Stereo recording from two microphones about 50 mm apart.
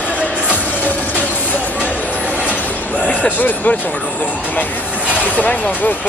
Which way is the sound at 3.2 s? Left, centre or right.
Left.